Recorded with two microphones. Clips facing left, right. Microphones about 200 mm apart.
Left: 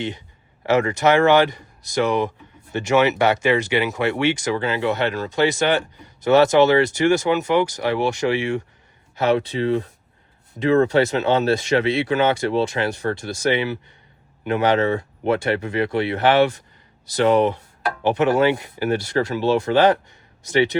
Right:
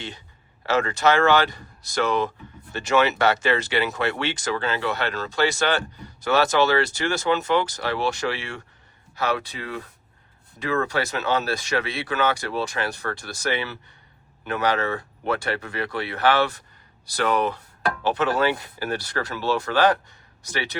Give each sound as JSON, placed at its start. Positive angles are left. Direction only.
{"t": 0.6, "sound": "speech", "side_deg": 15}